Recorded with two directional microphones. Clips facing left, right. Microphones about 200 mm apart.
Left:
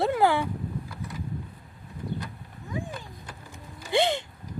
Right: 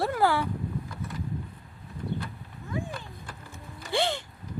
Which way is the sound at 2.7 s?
15° left (ahead or behind).